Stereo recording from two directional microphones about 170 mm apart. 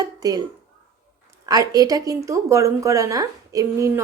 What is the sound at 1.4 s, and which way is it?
Speech, 20° right (ahead or behind).